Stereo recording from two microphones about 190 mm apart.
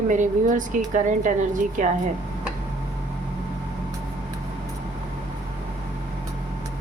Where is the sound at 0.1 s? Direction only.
40° right (ahead or behind).